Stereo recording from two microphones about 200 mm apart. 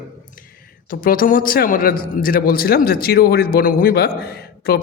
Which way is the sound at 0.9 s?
45° left (ahead or behind).